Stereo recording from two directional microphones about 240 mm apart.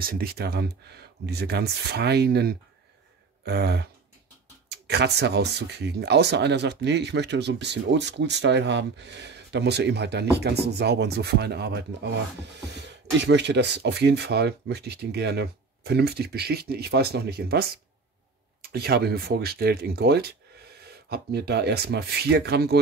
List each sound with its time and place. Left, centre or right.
0.0 s speech: right